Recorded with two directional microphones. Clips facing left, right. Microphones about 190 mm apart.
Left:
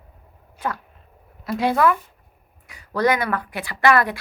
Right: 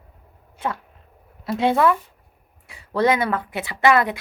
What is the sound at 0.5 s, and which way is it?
Sneeze, 25° right (ahead or behind).